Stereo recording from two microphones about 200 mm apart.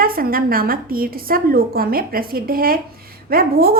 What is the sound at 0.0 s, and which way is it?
A woman's voice, 45° right (ahead or behind).